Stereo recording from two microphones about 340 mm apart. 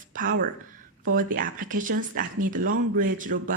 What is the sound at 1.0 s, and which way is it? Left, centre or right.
Speech, right.